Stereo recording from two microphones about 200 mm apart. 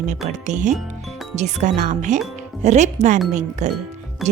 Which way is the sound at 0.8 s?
Centre (ahead or behind).